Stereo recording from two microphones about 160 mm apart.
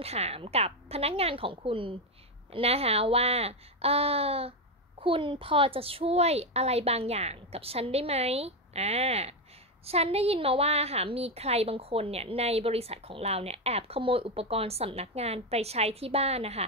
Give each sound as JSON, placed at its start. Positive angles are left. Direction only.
{"t": 0.0, "sound": "a woman's voice", "side_deg": -40}